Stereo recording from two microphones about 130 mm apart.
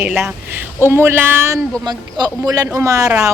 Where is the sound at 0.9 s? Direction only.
20° right (ahead or behind).